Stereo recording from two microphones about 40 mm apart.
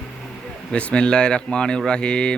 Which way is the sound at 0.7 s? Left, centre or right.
Left.